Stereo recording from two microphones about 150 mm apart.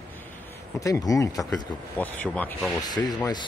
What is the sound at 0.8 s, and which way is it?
Speech, 25° left (ahead or behind).